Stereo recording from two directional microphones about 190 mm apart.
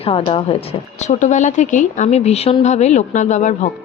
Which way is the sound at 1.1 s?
40° left (ahead or behind).